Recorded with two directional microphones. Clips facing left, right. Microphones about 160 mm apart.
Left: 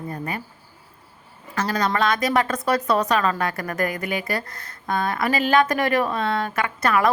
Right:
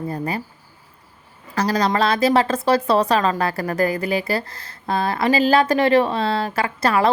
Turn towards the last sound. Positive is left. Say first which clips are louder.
# right 2 dB
turn(degrees=-30)  # may be behind; listen again after turning